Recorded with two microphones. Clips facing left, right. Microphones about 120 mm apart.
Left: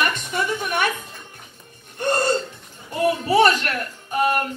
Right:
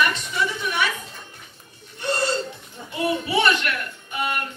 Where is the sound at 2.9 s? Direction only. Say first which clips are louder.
Left 5 dB; 40° left (ahead or behind).